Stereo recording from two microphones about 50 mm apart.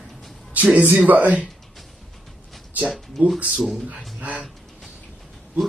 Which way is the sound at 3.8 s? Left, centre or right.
Right.